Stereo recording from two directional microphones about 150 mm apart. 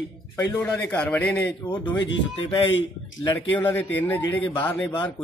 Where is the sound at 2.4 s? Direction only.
35° left (ahead or behind).